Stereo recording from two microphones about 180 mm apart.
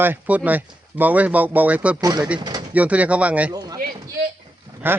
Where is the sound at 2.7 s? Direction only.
10° right (ahead or behind).